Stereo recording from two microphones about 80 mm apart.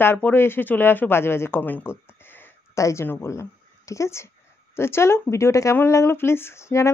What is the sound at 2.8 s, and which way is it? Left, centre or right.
Speech, left.